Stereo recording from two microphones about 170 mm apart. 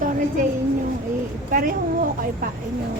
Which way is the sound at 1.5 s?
55° right (ahead or behind).